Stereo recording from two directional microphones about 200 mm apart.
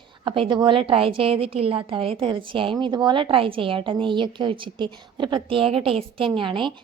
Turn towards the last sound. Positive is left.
turn(degrees=-25)  # may be behind; listen again after turning